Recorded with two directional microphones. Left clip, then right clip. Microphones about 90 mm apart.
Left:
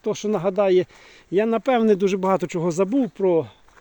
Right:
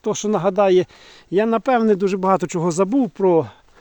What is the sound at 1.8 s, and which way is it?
Speech, 5° right (ahead or behind).